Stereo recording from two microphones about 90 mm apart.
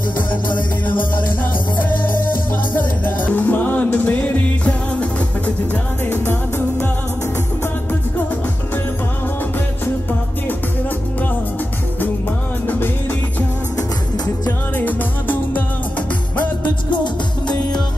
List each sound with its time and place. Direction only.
3.3 s music: 20° left (ahead or behind)
6.0 s music: 25° left (ahead or behind)
12.6 s music: 25° left (ahead or behind)
13.7 s music: 50° left (ahead or behind)
14.8 s music: 20° left (ahead or behind)